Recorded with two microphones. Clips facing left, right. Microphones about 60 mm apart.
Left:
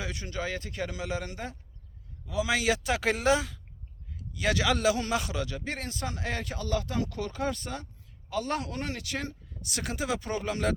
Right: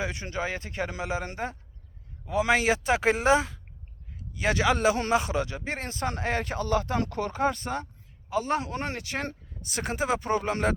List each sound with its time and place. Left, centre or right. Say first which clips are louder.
0.0 s a man's voice: right 4 dB; right
8.3 s a man's voice: right 4 dB; right